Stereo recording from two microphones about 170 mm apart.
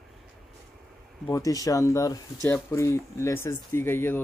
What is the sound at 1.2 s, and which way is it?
Speech, 20° left (ahead or behind).